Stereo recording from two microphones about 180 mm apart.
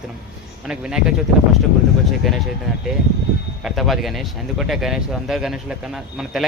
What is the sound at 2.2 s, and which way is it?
Speech, centre (ahead or behind).